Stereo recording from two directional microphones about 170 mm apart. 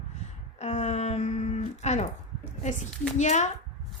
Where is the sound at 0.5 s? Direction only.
40° left (ahead or behind).